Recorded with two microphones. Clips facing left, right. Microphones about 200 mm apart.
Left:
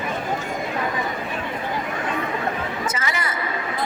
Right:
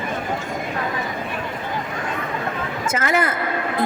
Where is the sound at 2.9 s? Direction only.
55° right (ahead or behind).